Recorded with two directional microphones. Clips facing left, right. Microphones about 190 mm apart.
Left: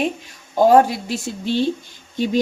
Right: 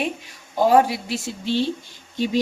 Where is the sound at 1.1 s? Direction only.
50° left (ahead or behind).